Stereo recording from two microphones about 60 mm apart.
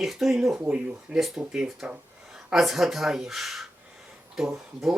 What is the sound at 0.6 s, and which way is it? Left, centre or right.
Speech, centre.